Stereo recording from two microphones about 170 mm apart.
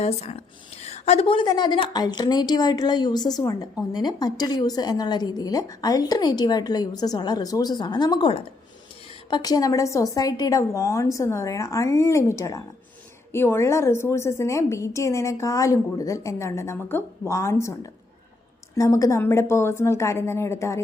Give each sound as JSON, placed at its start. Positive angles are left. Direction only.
{"t": 0.0, "sound": "a woman's voice", "side_deg": 40}
{"t": 18.8, "sound": "a woman's voice", "side_deg": 20}